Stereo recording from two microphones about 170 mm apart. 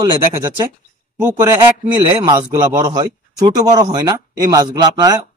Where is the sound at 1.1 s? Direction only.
10° right (ahead or behind).